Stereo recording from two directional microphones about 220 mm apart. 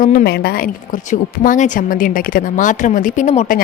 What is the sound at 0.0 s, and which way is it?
A woman's voice, 40° left (ahead or behind).